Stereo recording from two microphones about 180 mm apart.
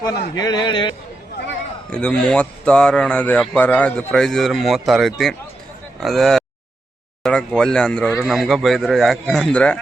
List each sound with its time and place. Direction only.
0.0 s a man's voice: 20° left (ahead or behind)
1.9 s speech: 5° left (ahead or behind)